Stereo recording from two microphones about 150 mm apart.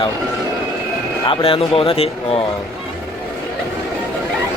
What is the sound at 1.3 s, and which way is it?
Speech, 35° left (ahead or behind).